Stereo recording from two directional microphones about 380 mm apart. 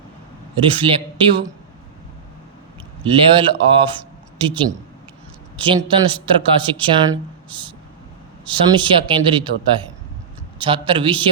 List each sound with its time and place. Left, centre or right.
0.5 s speech: centre
3.0 s speech: centre
10.6 s speech: centre